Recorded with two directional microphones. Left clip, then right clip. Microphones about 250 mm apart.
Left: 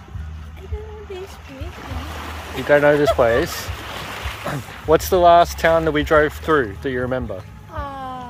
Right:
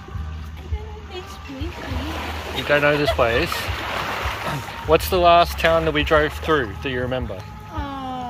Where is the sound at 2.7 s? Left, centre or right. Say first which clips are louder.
Left 4 dB; left.